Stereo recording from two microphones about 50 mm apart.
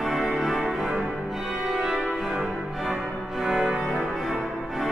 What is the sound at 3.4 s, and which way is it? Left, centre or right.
Cello, centre.